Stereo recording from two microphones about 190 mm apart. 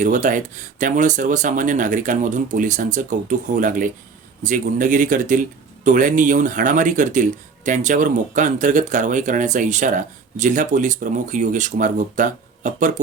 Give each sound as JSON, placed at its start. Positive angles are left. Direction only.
{"t": 0.0, "sound": "speech", "side_deg": -40}